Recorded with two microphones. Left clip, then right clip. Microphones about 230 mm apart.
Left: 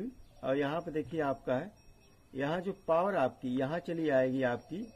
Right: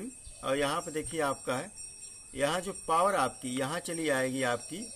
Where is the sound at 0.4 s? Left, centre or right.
Centre.